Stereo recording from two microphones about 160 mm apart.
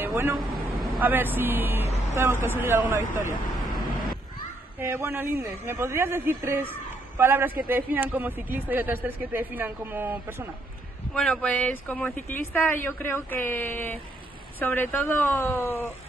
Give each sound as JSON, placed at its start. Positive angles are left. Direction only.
{"t": 0.0, "sound": "vehicle", "side_deg": -15}
{"t": 0.4, "sound": "vehicle", "side_deg": 0}
{"t": 1.0, "sound": "speech", "side_deg": -10}
{"t": 2.9, "sound": "speech", "side_deg": -55}
{"t": 4.7, "sound": "speech", "side_deg": -15}
{"t": 11.1, "sound": "speech", "side_deg": 5}